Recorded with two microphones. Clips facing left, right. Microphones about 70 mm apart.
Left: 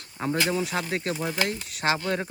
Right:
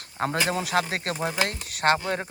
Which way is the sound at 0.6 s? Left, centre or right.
Right.